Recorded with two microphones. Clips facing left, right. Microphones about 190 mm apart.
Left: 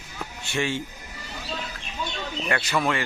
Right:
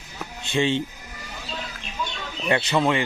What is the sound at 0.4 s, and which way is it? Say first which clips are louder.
Speech: right 5 dB; 20° right (ahead or behind).